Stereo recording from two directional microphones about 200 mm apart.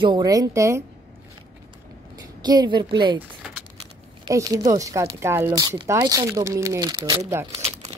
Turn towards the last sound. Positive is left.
turn(degrees=-20)  # may be behind; listen again after turning